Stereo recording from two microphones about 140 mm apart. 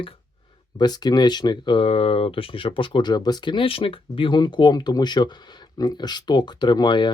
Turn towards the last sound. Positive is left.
turn(degrees=35)  # may be behind; listen again after turning